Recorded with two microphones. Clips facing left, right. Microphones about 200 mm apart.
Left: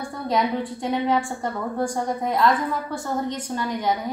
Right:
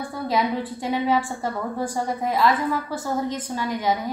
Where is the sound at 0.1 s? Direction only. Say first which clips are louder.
Left 1 dB; 5° right (ahead or behind).